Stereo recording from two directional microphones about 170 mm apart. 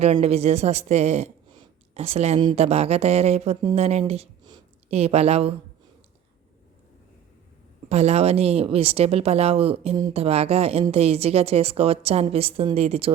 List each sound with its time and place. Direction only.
0.0 s a woman's voice: 40° right (ahead or behind)
1.5 s a sound: 40° right (ahead or behind)
2.6 s a woman's voice: 35° right (ahead or behind)
7.9 s a woman's voice: 40° right (ahead or behind)